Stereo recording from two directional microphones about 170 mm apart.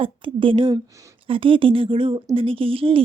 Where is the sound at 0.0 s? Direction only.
30° right (ahead or behind).